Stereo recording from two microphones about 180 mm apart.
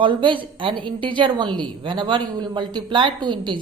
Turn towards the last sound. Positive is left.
turn(degrees=-25)  # may be behind; listen again after turning